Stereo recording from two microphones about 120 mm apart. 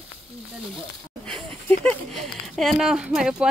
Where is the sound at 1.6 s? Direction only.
15° left (ahead or behind).